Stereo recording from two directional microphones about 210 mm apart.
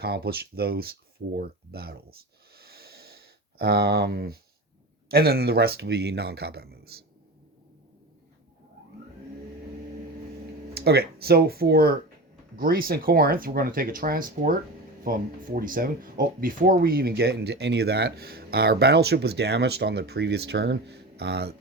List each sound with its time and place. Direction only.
0.0 s speech: 50° right (ahead or behind)
2.6 s sniff: 50° right (ahead or behind)
5.0 s speech: 45° right (ahead or behind)
10.8 s speech: 50° right (ahead or behind)